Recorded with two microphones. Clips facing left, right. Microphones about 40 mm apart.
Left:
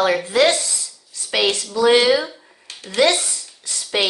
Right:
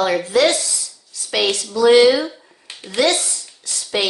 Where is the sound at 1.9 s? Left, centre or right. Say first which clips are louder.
Right 5 dB; centre.